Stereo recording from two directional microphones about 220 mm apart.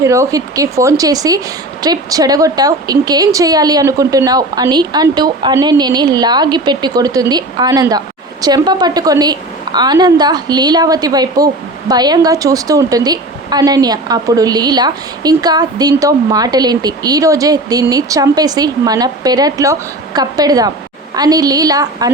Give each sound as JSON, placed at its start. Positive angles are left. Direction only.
{"t": 0.0, "sound": "a woman's voice", "side_deg": -15}